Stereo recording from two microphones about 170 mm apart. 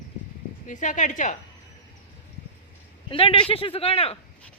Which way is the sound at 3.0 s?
30° left (ahead or behind).